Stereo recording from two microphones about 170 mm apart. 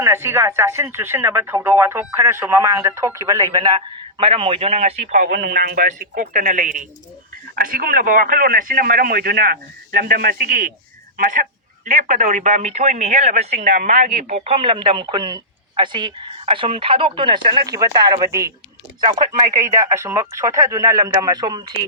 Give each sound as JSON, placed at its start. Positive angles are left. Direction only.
{"t": 0.0, "sound": "a man's voice", "side_deg": -15}
{"t": 5.4, "sound": "speech", "side_deg": -70}